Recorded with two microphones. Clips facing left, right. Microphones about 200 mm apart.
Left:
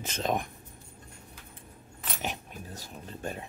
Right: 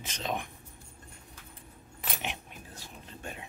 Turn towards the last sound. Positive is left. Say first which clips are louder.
# left 6 dB
turn(degrees=40)  # may be behind; listen again after turning